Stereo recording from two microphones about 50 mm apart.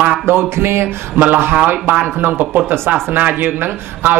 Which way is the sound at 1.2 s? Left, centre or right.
Right.